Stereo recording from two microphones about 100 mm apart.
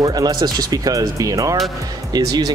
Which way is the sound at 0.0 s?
40° right (ahead or behind).